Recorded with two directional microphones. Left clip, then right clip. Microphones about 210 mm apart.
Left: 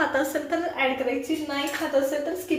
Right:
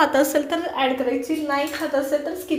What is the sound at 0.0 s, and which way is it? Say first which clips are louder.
Speech: right 6 dB; 40° right (ahead or behind).